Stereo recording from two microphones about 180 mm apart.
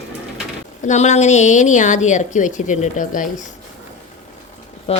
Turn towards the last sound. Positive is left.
turn(degrees=35)  # may be behind; listen again after turning